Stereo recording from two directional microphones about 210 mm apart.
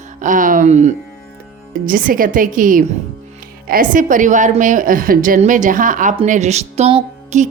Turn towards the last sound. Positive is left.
turn(degrees=-30)  # may be behind; listen again after turning